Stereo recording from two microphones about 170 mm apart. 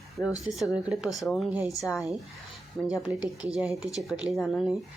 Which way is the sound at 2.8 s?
5° left (ahead or behind).